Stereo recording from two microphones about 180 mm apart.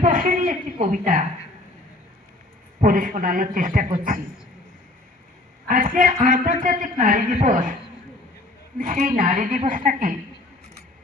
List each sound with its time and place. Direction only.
0.0 s a woman's voice: 50° right (ahead or behind)
2.8 s a man's voice: 45° right (ahead or behind)
5.6 s a man's voice: 50° right (ahead or behind)
8.8 s a man's voice: 40° right (ahead or behind)